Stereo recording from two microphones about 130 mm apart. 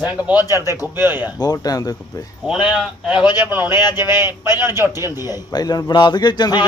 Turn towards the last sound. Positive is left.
turn(degrees=35)  # may be behind; listen again after turning